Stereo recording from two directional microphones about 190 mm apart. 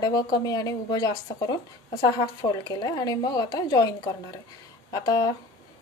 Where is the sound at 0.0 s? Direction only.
20° left (ahead or behind).